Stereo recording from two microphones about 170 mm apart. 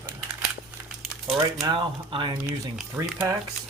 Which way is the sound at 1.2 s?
25° right (ahead or behind).